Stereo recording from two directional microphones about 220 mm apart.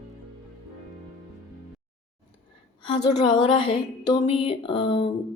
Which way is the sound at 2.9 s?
20° left (ahead or behind).